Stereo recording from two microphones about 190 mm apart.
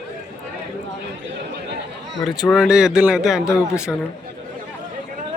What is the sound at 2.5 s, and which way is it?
Speech, 5° right (ahead or behind).